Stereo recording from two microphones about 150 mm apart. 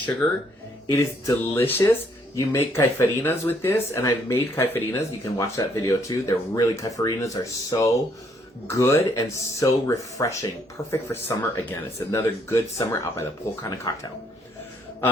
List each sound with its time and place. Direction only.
0.9 s speech: 20° left (ahead or behind)